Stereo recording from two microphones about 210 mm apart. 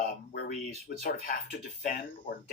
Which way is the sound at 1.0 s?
45° left (ahead or behind).